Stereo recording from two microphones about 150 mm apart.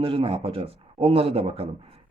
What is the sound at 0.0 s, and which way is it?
Speech, 35° right (ahead or behind).